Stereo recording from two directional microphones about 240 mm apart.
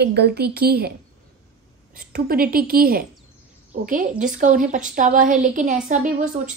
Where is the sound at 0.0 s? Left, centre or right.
Right.